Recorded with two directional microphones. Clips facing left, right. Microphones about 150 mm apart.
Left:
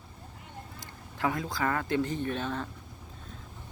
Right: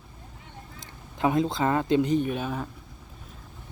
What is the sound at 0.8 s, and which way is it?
Speech, 20° right (ahead or behind).